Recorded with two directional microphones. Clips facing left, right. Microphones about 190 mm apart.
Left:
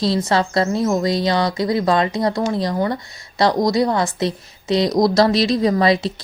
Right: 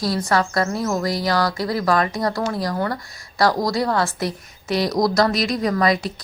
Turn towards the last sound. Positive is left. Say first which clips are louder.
# left 3 dB
turn(degrees=25)  # may be behind; listen again after turning